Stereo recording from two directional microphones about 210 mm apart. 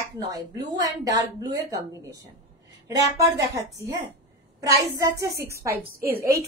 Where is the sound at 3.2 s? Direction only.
15° right (ahead or behind).